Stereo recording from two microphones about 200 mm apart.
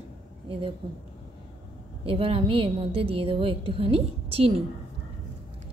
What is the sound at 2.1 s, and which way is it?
A woman's voice, 25° right (ahead or behind).